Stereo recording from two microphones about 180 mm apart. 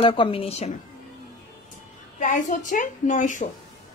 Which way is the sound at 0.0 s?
30° left (ahead or behind).